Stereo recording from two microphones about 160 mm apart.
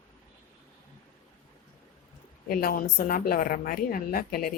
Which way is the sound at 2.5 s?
65° left (ahead or behind).